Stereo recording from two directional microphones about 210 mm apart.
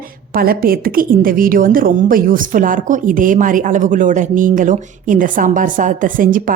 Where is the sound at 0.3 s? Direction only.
45° right (ahead or behind).